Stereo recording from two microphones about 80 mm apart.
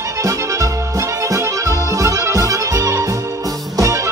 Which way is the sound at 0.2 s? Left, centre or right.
Right.